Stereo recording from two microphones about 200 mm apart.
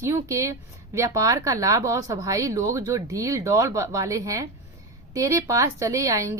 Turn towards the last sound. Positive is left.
turn(degrees=-15)  # may be behind; listen again after turning